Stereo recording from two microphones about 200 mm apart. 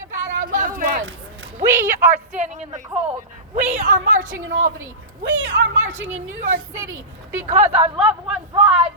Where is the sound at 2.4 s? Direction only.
35° right (ahead or behind).